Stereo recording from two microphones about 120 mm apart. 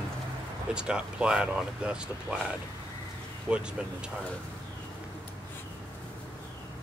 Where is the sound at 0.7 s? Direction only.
10° right (ahead or behind).